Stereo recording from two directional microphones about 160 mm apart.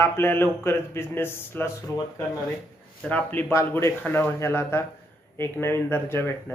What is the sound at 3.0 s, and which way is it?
Speech, 10° left (ahead or behind).